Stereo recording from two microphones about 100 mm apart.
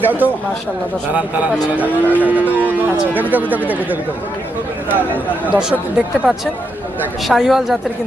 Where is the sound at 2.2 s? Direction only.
15° right (ahead or behind).